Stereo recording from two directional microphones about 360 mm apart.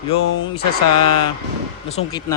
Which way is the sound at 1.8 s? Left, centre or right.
Centre.